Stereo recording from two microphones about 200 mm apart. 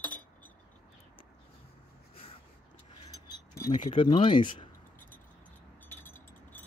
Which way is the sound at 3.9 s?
25° left (ahead or behind).